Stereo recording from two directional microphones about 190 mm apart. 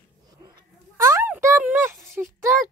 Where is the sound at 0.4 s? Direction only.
20° right (ahead or behind).